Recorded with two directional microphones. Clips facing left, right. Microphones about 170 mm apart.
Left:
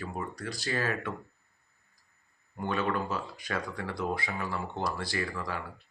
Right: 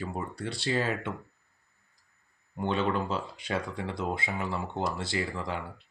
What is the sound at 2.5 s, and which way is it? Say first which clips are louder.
Speech: right 2 dB; 25° right (ahead or behind).